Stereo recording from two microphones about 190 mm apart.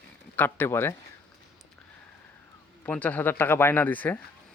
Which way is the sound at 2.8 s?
10° left (ahead or behind).